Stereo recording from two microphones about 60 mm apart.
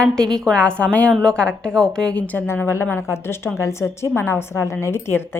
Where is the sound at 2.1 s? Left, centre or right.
Left.